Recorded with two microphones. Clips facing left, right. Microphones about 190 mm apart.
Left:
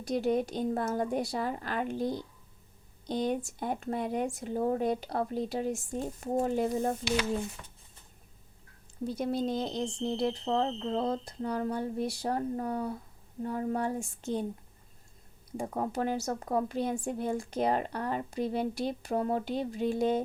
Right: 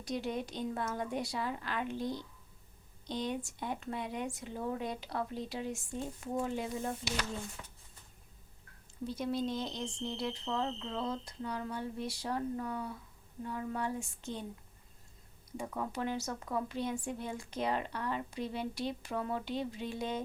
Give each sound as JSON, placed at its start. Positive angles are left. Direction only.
{"t": 0.1, "sound": "speech", "side_deg": 45}
{"t": 9.2, "sound": "speech", "side_deg": 50}
{"t": 15.5, "sound": "speech", "side_deg": 40}